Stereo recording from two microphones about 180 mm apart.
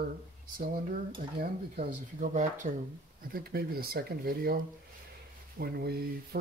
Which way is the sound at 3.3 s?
55° right (ahead or behind).